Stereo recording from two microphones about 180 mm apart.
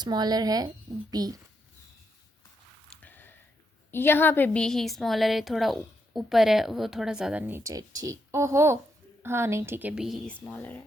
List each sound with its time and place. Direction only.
0.0 s speech: 20° right (ahead or behind)
3.0 s a sound: 10° left (ahead or behind)
3.9 s a woman's voice: 10° left (ahead or behind)